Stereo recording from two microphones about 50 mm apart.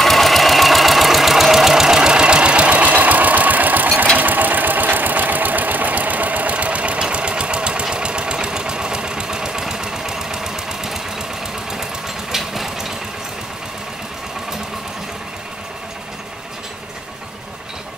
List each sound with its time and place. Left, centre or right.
0.0 s engine: centre
12.3 s engine: centre